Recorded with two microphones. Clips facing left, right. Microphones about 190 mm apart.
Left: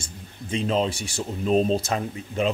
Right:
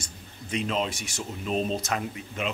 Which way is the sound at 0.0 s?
30° left (ahead or behind).